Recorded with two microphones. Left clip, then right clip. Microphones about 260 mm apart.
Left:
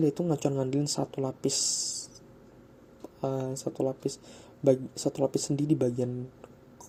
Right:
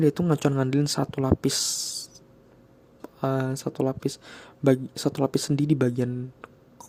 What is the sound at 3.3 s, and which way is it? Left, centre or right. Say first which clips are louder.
Speech: right 5 dB; right.